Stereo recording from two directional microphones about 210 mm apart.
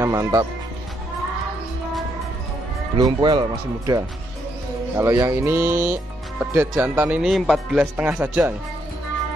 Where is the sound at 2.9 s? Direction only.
20° right (ahead or behind).